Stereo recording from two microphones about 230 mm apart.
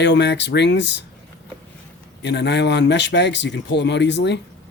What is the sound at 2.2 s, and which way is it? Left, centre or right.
Speech, left.